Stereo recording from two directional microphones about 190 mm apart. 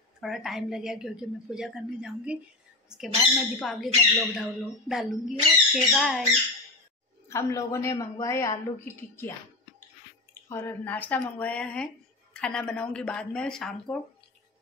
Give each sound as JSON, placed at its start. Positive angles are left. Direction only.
{"t": 0.2, "sound": "a woman's voice", "side_deg": 0}
{"t": 7.2, "sound": "a woman's voice", "side_deg": 15}
{"t": 10.5, "sound": "a woman's voice", "side_deg": 10}